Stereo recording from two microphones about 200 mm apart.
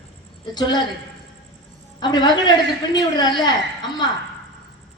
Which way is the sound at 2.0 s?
20° left (ahead or behind).